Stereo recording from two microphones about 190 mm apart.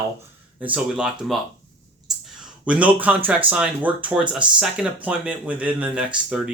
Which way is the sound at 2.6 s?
5° right (ahead or behind).